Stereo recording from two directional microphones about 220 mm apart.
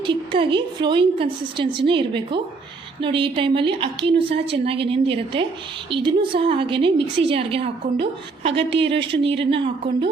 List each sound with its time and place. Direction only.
0.0 s a woman's voice: 20° right (ahead or behind)